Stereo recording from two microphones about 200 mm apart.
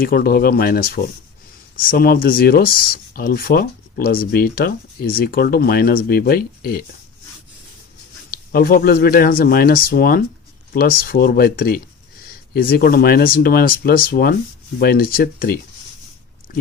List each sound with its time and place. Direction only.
0.0 s speech: 45° left (ahead or behind)
8.3 s speech: 50° left (ahead or behind)